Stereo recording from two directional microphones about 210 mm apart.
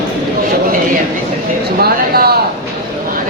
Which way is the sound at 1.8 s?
50° right (ahead or behind).